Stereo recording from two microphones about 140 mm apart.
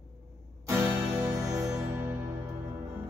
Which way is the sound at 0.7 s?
20° right (ahead or behind).